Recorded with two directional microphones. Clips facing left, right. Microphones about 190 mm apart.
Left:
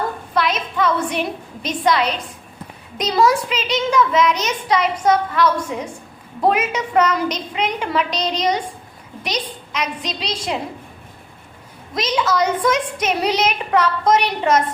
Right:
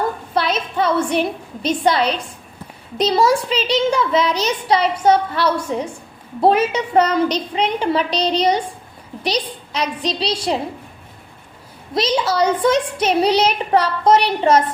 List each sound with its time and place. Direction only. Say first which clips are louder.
0.3 s a sound: even; 30° right (ahead or behind)
1.6 s a child's voice: right 2 dB; 30° right (ahead or behind)
11.9 s a child's voice: right 2 dB; 30° right (ahead or behind)